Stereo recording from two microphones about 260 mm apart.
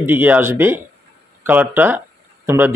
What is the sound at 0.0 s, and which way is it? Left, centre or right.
Speech, centre.